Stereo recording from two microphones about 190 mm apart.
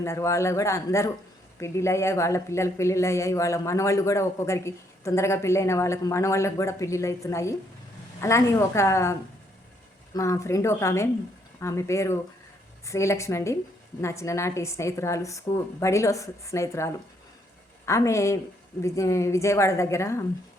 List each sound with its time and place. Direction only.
0.0 s speech: 15° left (ahead or behind)
10.2 s speech: 15° left (ahead or behind)